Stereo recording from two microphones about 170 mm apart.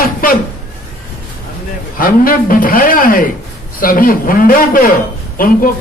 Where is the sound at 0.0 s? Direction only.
55° left (ahead or behind).